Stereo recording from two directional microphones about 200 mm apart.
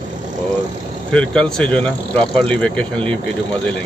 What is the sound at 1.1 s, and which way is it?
Speech, 5° left (ahead or behind).